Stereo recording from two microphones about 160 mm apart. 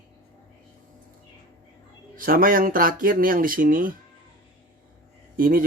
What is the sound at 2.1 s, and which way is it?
Speech, 60° right (ahead or behind).